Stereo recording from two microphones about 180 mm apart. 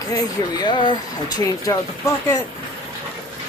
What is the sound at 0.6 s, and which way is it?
Speech, 25° left (ahead or behind).